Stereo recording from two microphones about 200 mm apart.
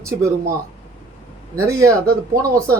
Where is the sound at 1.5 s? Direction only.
15° right (ahead or behind).